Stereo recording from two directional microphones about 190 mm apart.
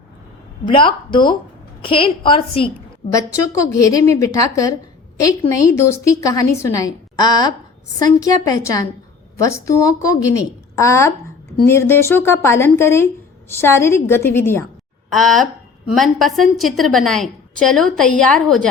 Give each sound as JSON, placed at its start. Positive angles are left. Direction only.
{"t": 0.7, "sound": "a woman's voice", "side_deg": 25}
{"t": 3.1, "sound": "a woman's voice", "side_deg": 15}
{"t": 15.1, "sound": "a woman's voice", "side_deg": 0}